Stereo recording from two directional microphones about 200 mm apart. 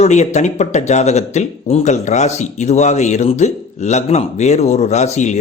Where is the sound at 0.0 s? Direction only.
35° left (ahead or behind).